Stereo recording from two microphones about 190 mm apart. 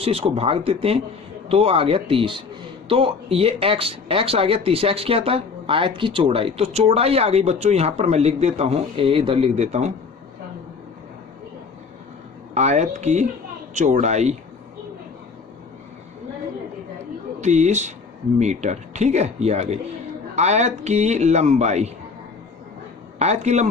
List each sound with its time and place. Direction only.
0.0 s a man's voice: 30° right (ahead or behind)
12.5 s speech: 35° right (ahead or behind)
17.4 s speech: 35° right (ahead or behind)
23.1 s speech: 35° right (ahead or behind)